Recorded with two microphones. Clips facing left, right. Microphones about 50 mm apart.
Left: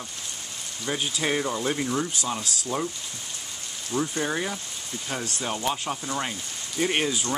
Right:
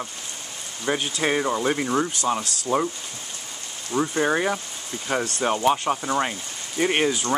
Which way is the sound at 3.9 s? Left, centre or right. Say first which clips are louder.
Right 5 dB; right.